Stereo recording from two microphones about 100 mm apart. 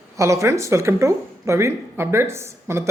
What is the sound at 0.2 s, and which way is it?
Speech, 30° right (ahead or behind).